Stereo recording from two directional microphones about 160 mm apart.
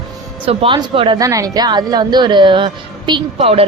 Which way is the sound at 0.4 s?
35° right (ahead or behind).